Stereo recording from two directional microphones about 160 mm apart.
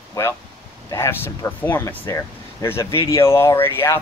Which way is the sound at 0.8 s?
20° left (ahead or behind).